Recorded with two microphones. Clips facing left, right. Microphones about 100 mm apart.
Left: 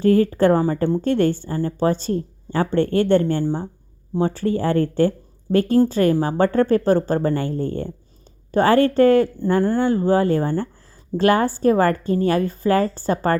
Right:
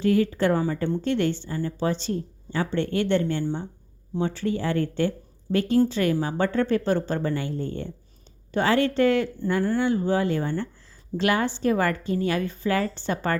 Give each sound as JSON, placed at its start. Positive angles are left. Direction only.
{"t": 0.0, "sound": "a woman's voice", "side_deg": 45}